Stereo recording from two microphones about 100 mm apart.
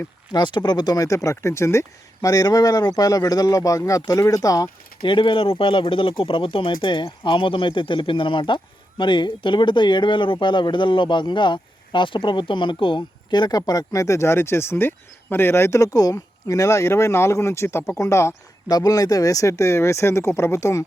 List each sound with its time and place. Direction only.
0.3 s speech: 45° left (ahead or behind)
5.0 s speech: 60° left (ahead or behind); by 20.8 s 30° left (ahead or behind)